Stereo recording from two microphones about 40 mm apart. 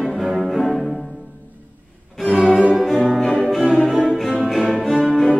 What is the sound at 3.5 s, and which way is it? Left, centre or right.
Music, centre.